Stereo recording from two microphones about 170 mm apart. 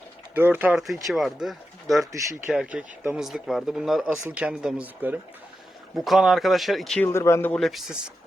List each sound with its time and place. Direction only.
0.3 s speech: 10° right (ahead or behind); by 7.1 s 5° left (ahead or behind)
7.1 s speech: 15° left (ahead or behind)
7.5 s speech: centre (ahead or behind)